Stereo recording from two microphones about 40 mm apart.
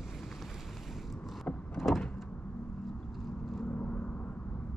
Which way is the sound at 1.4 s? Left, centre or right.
Centre.